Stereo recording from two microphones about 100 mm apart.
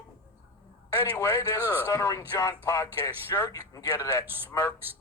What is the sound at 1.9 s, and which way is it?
Speech, 30° left (ahead or behind).